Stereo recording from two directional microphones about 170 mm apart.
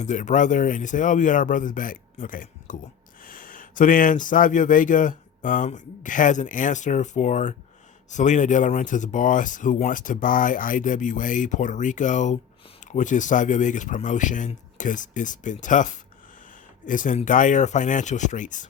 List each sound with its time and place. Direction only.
0.0 s speech: 45° left (ahead or behind)